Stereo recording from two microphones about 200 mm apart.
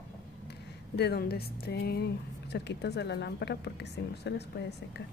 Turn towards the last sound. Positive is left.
turn(degrees=55)  # may be behind; listen again after turning